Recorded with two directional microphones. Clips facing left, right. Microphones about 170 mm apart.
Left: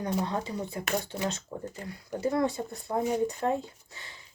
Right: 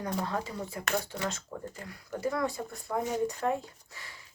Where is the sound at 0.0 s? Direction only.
20° left (ahead or behind).